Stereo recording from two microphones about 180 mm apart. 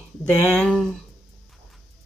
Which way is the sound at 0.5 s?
5° left (ahead or behind).